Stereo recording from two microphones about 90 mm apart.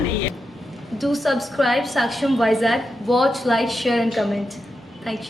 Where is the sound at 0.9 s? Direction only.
Centre (ahead or behind).